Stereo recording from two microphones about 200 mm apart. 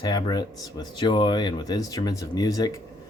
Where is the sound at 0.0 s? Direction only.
20° left (ahead or behind).